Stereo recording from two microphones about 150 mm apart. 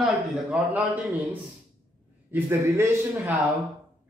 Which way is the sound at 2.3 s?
15° right (ahead or behind).